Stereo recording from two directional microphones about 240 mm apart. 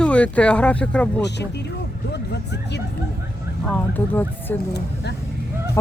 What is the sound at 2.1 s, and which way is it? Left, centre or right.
Speech, left.